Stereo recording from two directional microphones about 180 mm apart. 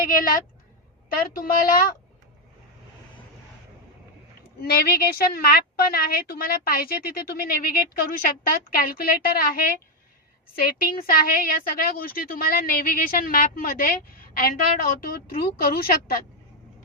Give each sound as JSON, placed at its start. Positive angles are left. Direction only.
{"t": 0.1, "sound": "a woman's voice", "side_deg": 50}
{"t": 4.6, "sound": "a woman's voice", "side_deg": 60}
{"t": 15.0, "sound": "a woman's voice", "side_deg": 55}